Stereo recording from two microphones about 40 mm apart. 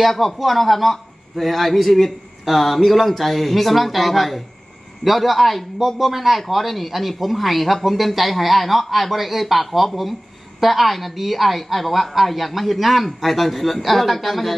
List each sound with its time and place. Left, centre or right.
0.0 s a man's voice: centre